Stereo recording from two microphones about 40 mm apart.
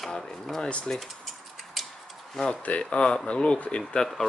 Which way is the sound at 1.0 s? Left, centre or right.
Centre.